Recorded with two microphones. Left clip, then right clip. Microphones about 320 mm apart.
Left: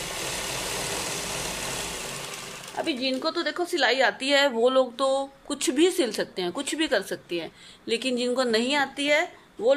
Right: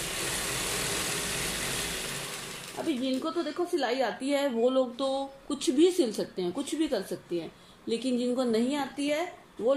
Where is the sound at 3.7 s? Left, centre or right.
Left.